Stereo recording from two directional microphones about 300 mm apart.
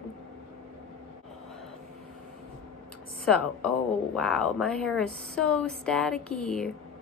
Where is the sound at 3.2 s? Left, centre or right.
Centre.